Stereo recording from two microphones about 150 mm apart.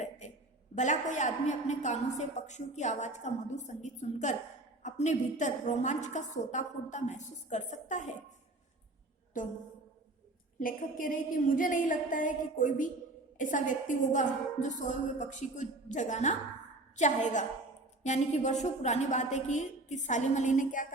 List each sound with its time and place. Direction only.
0.8 s a woman's voice: 55° left (ahead or behind)
9.4 s a woman's voice: 60° left (ahead or behind)
10.6 s a woman's voice: 65° left (ahead or behind)